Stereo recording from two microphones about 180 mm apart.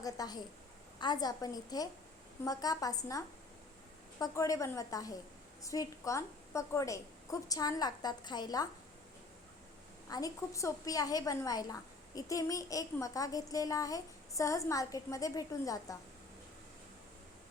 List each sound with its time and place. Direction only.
0.0 s a woman's voice: 20° left (ahead or behind)
10.1 s a woman's voice: 20° left (ahead or behind)